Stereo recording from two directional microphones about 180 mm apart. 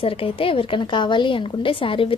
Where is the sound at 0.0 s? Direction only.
30° left (ahead or behind).